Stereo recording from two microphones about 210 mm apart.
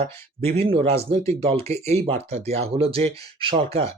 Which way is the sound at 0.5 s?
25° right (ahead or behind).